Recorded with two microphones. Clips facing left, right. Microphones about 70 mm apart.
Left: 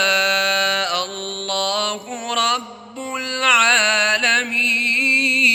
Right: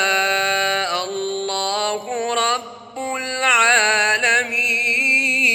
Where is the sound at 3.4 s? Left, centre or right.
Right.